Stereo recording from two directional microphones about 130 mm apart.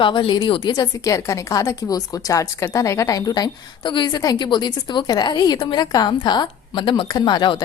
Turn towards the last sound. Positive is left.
turn(degrees=35)  # may be behind; listen again after turning